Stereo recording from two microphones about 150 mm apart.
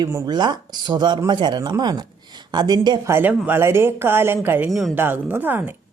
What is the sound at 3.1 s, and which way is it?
Speech, 10° right (ahead or behind).